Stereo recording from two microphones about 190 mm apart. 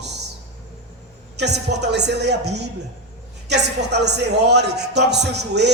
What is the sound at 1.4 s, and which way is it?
A man's voice, 65° right (ahead or behind).